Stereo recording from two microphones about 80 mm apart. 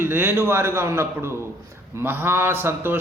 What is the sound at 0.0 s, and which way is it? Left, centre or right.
A man's voice, right.